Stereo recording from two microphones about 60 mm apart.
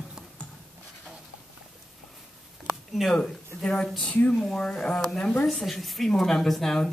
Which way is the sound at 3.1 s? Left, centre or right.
Centre.